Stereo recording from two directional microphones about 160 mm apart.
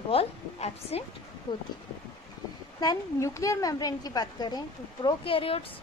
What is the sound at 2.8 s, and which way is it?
A woman's voice, 20° left (ahead or behind).